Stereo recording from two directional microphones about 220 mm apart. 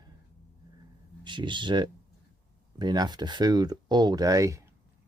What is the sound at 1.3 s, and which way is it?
Speech, 20° right (ahead or behind).